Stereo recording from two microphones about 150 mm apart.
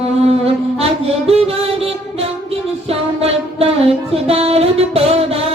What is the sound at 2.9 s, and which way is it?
Music, 40° right (ahead or behind).